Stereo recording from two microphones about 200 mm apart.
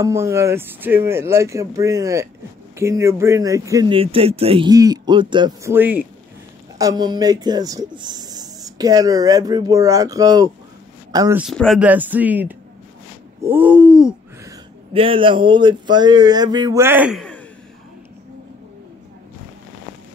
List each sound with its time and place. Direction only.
0.0 s speech: 15° right (ahead or behind)
11.3 s speech: centre (ahead or behind)
13.4 s a sound: 10° right (ahead or behind)
14.9 s speech: 25° right (ahead or behind); by 17.2 s 10° right (ahead or behind)